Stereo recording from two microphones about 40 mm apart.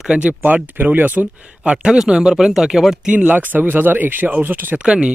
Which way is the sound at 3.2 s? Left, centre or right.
Right.